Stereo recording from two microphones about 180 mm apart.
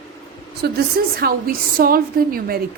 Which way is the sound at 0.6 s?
60° right (ahead or behind).